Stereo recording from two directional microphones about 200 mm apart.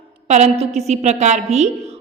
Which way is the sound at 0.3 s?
35° right (ahead or behind).